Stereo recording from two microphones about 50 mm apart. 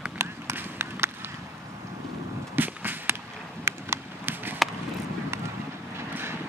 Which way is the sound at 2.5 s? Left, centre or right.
Right.